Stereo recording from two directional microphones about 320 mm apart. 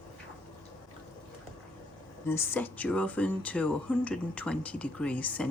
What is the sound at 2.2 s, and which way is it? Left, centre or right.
Speech, centre.